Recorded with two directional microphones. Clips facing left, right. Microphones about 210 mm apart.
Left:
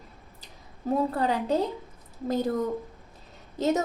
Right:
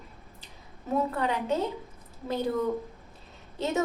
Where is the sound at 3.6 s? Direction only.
40° left (ahead or behind).